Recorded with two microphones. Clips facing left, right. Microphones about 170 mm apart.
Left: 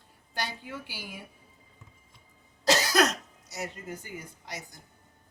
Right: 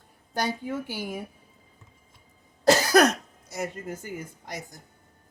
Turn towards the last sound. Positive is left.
turn(degrees=-45)  # may be behind; listen again after turning